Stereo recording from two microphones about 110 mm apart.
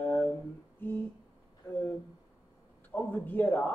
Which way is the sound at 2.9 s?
15° left (ahead or behind).